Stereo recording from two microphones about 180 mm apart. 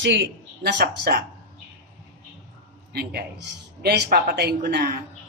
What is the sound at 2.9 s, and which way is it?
A woman's voice, 60° right (ahead or behind).